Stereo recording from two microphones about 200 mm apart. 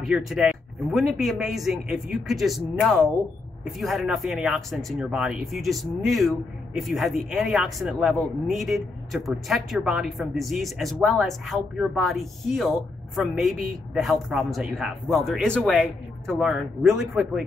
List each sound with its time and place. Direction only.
0.0 s speech: centre (ahead or behind)